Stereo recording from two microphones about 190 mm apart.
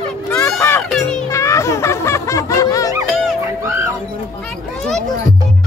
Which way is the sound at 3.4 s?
15° right (ahead or behind).